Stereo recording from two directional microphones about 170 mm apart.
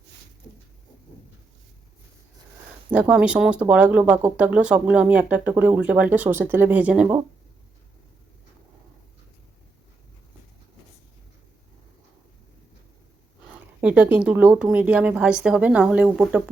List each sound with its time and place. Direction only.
2.9 s speech: 5° right (ahead or behind)
13.8 s speech: 10° right (ahead or behind)